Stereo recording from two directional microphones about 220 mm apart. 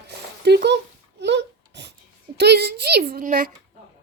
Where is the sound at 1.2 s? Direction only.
55° right (ahead or behind).